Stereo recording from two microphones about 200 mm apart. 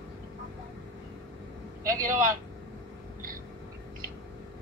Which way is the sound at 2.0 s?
40° right (ahead or behind).